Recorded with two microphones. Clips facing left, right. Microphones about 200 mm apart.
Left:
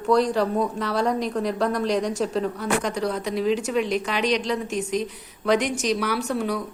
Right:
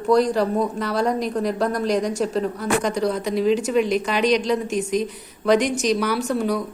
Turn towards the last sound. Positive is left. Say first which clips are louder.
# right 3 dB
turn(degrees=0)  # may be behind; listen again after turning